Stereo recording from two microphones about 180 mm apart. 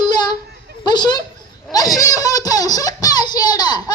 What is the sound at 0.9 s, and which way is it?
Speech, 25° left (ahead or behind).